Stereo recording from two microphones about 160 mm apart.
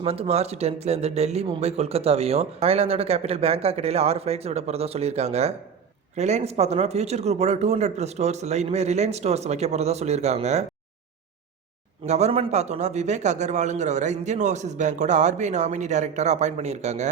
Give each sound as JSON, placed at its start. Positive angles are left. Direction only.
{"t": 0.0, "sound": "a man's voice", "side_deg": -40}
{"t": 12.0, "sound": "a man's voice", "side_deg": -45}